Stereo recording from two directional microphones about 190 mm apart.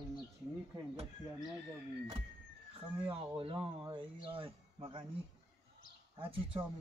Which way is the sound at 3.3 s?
25° right (ahead or behind).